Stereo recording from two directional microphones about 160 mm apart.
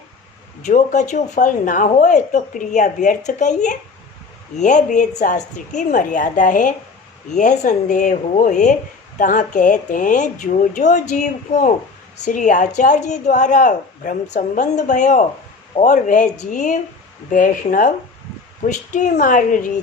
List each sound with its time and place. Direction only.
0.6 s speech: 50° left (ahead or behind)